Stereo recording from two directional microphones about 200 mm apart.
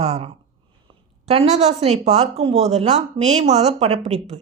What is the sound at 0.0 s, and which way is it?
Speech, 30° right (ahead or behind).